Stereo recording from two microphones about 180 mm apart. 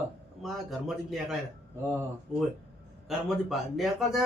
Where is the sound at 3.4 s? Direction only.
Centre (ahead or behind).